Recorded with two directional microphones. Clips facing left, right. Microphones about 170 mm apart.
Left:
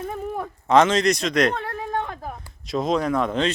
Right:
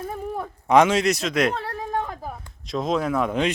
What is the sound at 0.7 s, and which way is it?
Speech, 10° right (ahead or behind).